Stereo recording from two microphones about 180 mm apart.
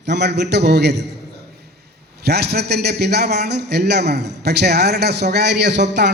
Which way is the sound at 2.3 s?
65° right (ahead or behind).